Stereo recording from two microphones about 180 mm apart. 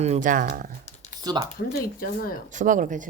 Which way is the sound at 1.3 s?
20° right (ahead or behind).